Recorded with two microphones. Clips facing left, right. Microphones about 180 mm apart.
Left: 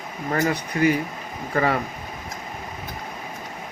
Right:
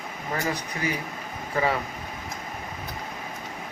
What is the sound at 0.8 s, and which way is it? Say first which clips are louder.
A man's voice: left 9 dB; 65° left (ahead or behind).